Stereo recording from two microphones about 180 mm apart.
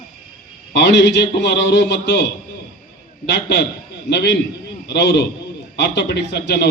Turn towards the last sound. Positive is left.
turn(degrees=70)  # may be behind; listen again after turning